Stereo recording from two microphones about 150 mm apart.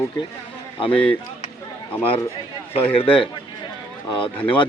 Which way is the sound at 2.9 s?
35° left (ahead or behind).